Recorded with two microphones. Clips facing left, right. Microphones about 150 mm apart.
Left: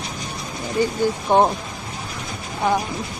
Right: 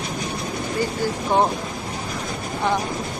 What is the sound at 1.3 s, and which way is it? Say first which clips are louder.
Speech: left 3 dB; 20° left (ahead or behind).